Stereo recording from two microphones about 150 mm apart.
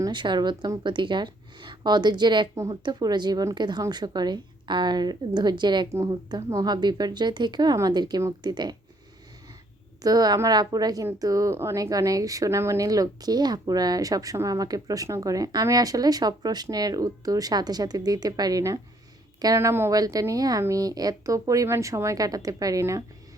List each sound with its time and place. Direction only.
0.0 s a woman's voice: 30° right (ahead or behind)
10.0 s a woman's voice: 25° right (ahead or behind)